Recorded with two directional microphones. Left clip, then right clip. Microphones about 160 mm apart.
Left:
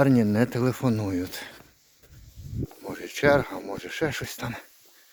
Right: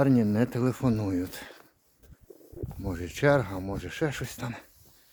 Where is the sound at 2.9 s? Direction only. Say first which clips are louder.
Left 3 dB; 20° right (ahead or behind).